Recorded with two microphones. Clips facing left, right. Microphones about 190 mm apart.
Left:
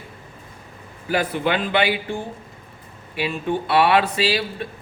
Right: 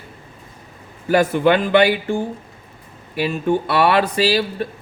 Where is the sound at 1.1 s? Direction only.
45° right (ahead or behind).